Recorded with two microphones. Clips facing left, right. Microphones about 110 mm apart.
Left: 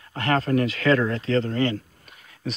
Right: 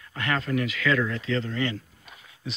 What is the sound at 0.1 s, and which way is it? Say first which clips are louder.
Speech: left 5 dB; 35° left (ahead or behind).